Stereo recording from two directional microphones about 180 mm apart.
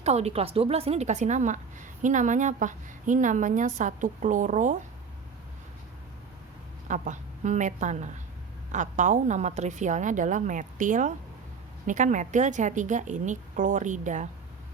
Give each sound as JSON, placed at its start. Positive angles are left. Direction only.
{"t": 0.0, "sound": "a woman's voice", "side_deg": -35}
{"t": 6.8, "sound": "a woman's voice", "side_deg": -45}